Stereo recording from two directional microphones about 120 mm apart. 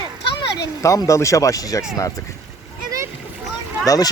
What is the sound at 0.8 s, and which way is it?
Speech, 25° left (ahead or behind).